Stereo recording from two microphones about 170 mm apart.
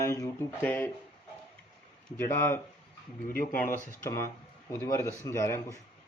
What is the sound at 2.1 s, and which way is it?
Speech, 15° left (ahead or behind).